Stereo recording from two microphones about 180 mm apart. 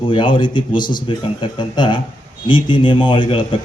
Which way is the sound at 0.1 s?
25° left (ahead or behind).